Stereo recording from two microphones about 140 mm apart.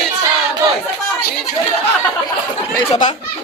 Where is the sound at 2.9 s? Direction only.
60° left (ahead or behind).